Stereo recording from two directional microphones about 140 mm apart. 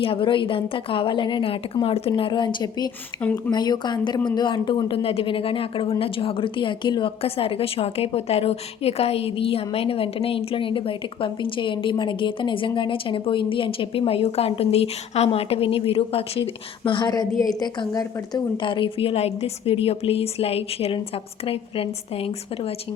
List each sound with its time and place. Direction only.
0.0 s a woman's voice: 40° left (ahead or behind)
3.2 s speech: 10° left (ahead or behind)
3.5 s a woman's voice: 30° left (ahead or behind)